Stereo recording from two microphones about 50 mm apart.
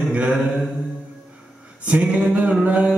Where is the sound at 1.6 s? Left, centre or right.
Right.